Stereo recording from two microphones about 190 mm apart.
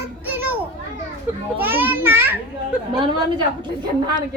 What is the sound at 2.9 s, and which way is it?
Speech, 25° right (ahead or behind).